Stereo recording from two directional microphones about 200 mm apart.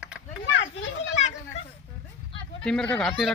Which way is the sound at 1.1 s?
35° left (ahead or behind).